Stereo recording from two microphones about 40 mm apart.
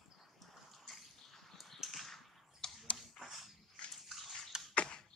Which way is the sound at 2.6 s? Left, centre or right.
Centre.